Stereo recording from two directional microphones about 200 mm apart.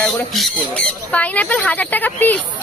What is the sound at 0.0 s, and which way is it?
A woman's voice, centre (ahead or behind).